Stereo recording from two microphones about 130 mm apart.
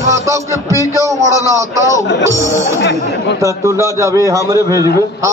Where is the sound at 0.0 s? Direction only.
25° right (ahead or behind).